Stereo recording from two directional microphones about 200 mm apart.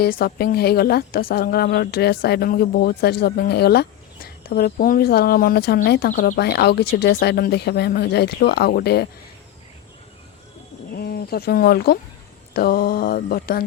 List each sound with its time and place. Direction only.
0.0 s a woman's voice: 45° left (ahead or behind)
10.9 s a woman's voice: 50° left (ahead or behind)